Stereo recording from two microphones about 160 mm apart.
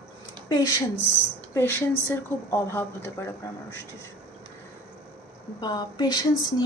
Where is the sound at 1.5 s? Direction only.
15° left (ahead or behind).